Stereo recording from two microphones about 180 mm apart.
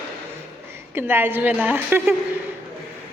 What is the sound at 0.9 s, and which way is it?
A woman's voice, 10° right (ahead or behind).